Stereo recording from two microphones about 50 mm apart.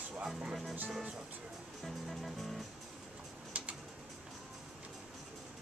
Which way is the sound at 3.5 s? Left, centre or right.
Right.